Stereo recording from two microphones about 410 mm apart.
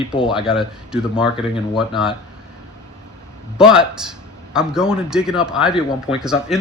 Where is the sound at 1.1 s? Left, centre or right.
Centre.